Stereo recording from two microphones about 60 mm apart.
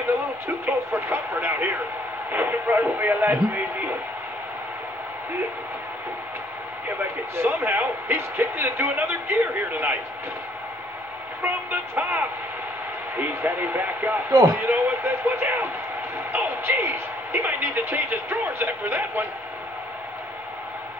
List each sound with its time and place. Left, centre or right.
0.7 s a man's voice: right
7.3 s a man's voice: right
11.4 s a man's voice: right
16.8 s speech: right
17.4 s a man's voice: right